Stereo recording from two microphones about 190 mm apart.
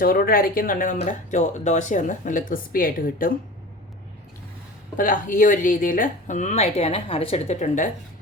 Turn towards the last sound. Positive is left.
turn(degrees=40)  # may be behind; listen again after turning